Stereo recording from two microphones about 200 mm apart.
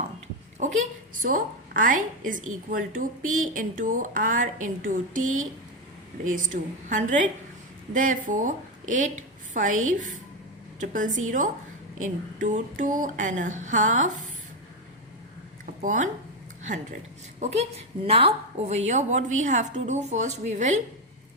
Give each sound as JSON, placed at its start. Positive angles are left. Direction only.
{"t": 0.6, "sound": "a woman's voice", "side_deg": -40}
{"t": 15.8, "sound": "speech", "side_deg": -40}
{"t": 17.4, "sound": "speech", "side_deg": -35}